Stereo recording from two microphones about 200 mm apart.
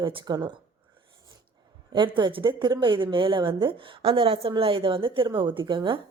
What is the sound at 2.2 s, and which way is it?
A woman's voice, 25° right (ahead or behind).